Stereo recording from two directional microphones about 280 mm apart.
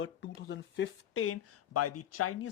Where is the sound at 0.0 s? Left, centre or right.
Left.